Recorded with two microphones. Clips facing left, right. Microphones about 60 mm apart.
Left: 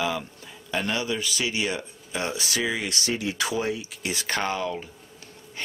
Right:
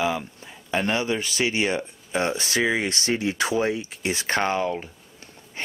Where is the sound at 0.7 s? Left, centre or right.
Right.